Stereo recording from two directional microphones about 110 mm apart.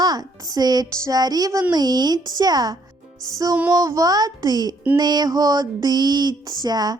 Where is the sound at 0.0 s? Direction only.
35° right (ahead or behind).